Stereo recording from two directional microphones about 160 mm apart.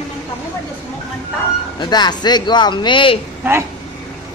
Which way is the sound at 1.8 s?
25° left (ahead or behind).